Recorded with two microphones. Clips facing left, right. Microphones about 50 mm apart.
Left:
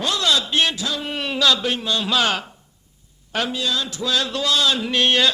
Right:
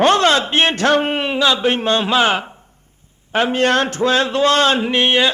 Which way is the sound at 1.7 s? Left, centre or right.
Right.